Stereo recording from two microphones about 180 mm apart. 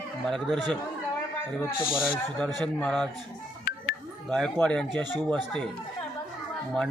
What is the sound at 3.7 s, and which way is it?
Music, 55° left (ahead or behind).